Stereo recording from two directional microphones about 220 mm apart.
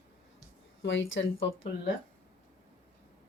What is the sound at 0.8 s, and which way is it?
Speech, 55° left (ahead or behind).